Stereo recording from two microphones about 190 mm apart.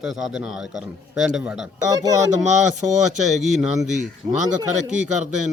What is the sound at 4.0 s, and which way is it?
Speech, 40° right (ahead or behind).